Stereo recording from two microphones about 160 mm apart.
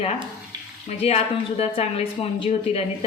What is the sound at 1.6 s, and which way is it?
Speech, 40° left (ahead or behind).